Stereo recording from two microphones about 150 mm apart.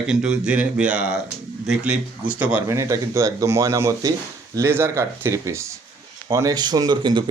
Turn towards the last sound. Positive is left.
turn(degrees=-30)  # may be behind; listen again after turning